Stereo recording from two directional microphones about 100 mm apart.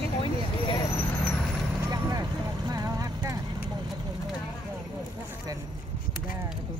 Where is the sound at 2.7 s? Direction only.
40° right (ahead or behind).